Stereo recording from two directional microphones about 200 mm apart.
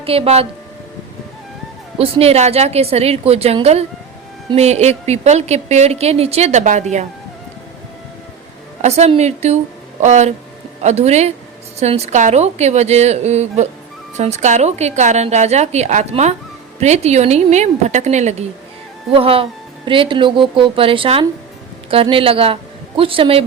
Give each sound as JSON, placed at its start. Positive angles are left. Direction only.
{"t": 0.0, "sound": "speech", "side_deg": -30}
{"t": 2.0, "sound": "a woman's voice", "side_deg": -30}
{"t": 8.8, "sound": "a woman's voice", "side_deg": -30}